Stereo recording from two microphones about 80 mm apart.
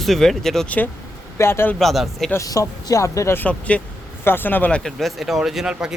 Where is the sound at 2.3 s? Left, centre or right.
Left.